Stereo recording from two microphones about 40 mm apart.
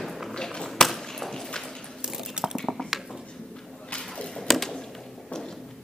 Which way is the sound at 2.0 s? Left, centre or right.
Centre.